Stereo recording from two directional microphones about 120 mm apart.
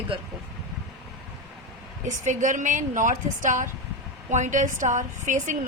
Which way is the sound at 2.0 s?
90° right.